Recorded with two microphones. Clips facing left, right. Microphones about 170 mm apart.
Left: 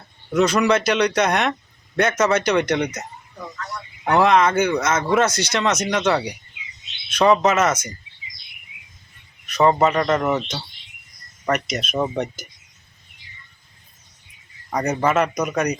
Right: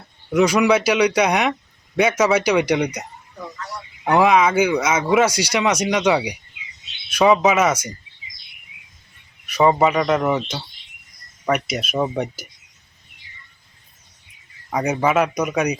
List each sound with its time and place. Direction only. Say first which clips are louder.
0.3 s speech: right 2 dB; 10° right (ahead or behind)
9.5 s speech: right 1 dB; 10° right (ahead or behind)
14.7 s speech: right 1 dB; 5° right (ahead or behind)